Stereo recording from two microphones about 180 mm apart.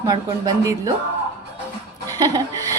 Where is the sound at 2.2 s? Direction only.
20° right (ahead or behind).